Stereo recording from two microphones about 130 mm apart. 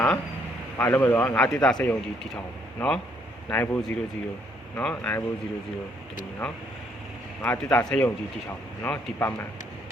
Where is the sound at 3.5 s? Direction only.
15° left (ahead or behind).